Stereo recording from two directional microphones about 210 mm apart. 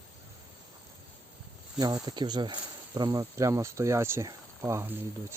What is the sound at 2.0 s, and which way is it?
Speech, 20° right (ahead or behind).